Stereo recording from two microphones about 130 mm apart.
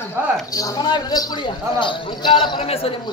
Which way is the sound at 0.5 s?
30° left (ahead or behind).